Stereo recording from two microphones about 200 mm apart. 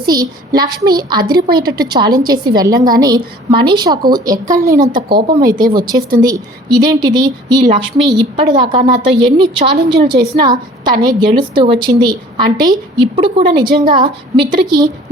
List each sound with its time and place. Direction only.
0.0 s a woman's voice: 20° right (ahead or behind)
5.5 s a woman's voice: 45° right (ahead or behind)
6.2 s a woman's voice: 20° right (ahead or behind)